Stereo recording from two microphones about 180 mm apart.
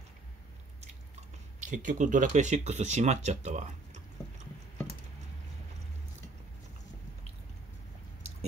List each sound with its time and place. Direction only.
1.6 s speech: 45° right (ahead or behind)